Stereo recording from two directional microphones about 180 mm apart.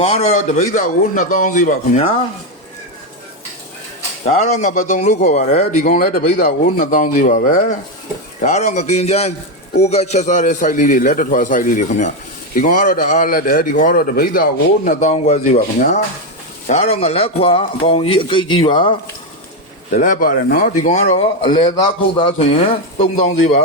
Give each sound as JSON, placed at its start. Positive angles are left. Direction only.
{"t": 0.0, "sound": "a man's voice", "side_deg": 35}
{"t": 4.3, "sound": "a man's voice", "side_deg": 40}
{"t": 16.6, "sound": "a man's voice", "side_deg": 35}
{"t": 19.9, "sound": "a man's voice", "side_deg": 45}